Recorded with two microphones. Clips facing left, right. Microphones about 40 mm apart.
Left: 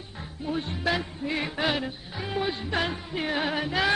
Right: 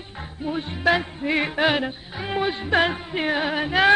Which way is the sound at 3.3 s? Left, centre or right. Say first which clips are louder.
Right 2 dB; centre.